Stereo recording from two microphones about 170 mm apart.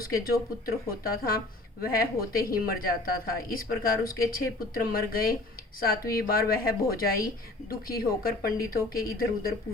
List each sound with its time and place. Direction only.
0.0 s a woman's voice: 60° left (ahead or behind)